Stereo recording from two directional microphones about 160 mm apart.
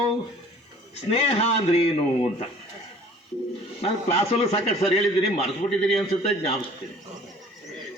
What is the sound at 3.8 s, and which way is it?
A man's voice, 40° left (ahead or behind).